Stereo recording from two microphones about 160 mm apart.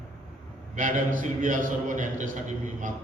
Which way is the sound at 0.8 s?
55° right (ahead or behind).